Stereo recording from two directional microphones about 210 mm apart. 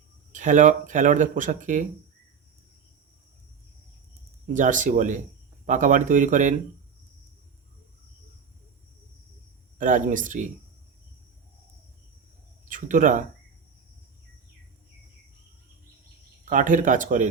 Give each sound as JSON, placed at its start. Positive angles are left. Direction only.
{"t": 0.3, "sound": "speech", "side_deg": -35}
{"t": 4.5, "sound": "speech", "side_deg": -35}
{"t": 9.7, "sound": "speech", "side_deg": -40}
{"t": 12.6, "sound": "speech", "side_deg": -40}
{"t": 16.5, "sound": "speech", "side_deg": -40}